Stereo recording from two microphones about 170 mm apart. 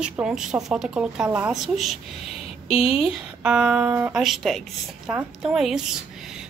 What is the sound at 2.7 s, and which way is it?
Speech, 35° left (ahead or behind).